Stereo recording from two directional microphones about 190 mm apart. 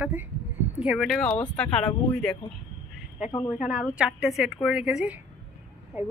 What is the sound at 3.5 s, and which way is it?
Speech, 5° right (ahead or behind).